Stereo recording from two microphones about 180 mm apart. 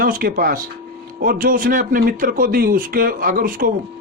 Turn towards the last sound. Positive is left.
turn(degrees=-50)  # may be behind; listen again after turning